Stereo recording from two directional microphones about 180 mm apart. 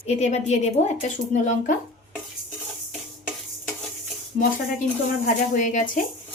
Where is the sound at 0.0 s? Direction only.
40° left (ahead or behind).